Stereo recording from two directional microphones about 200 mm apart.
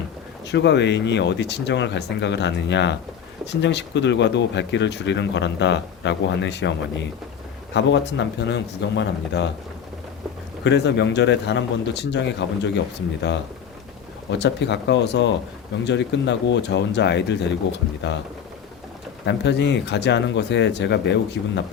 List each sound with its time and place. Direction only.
0.4 s speech: 60° left (ahead or behind)
10.6 s speech: 60° left (ahead or behind)
14.3 s speech: 60° left (ahead or behind)
19.2 s speech: 60° left (ahead or behind)